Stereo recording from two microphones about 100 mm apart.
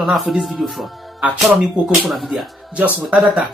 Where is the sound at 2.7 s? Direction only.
10° right (ahead or behind).